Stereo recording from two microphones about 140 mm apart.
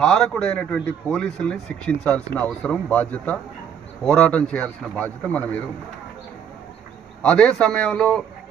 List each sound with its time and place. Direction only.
0.0 s a man's voice: 5° left (ahead or behind)
7.2 s a man's voice: 5° left (ahead or behind)